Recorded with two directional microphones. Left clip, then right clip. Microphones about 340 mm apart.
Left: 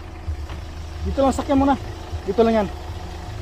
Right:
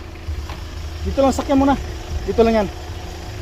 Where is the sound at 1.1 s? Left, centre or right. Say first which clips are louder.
Right 2 dB; centre.